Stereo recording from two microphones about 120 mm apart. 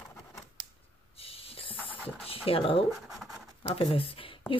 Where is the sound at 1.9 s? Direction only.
10° left (ahead or behind).